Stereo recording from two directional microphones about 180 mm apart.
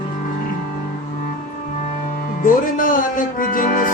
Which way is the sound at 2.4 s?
50° left (ahead or behind).